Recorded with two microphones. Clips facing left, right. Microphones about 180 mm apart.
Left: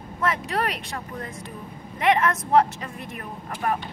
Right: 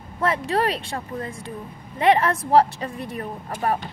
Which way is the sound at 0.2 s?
30° right (ahead or behind).